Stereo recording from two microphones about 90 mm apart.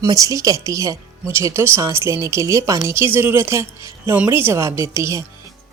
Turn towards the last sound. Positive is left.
turn(degrees=-30)  # may be behind; listen again after turning